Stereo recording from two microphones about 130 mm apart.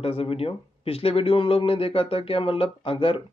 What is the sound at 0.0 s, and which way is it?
Speech, 50° left (ahead or behind).